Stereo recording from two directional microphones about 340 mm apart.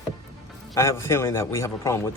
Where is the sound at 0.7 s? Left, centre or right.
Centre.